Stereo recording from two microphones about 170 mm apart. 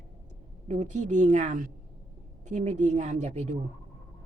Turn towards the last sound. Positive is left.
turn(degrees=-45)  # may be behind; listen again after turning